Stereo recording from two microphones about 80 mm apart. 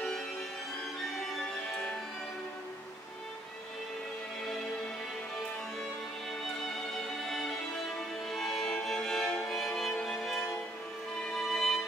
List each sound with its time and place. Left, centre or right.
6.9 s music: centre